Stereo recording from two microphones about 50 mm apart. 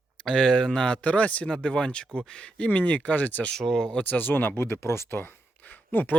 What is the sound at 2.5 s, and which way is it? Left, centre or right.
Speech, left.